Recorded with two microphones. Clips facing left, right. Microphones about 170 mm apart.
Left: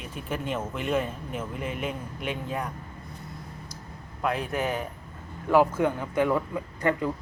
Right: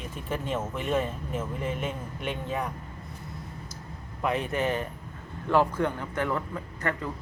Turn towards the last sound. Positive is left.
turn(degrees=15)  # may be behind; listen again after turning